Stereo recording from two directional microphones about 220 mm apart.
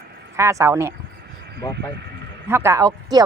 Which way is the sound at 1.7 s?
50° right (ahead or behind).